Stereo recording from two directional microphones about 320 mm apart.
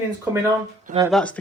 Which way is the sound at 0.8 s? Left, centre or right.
Centre.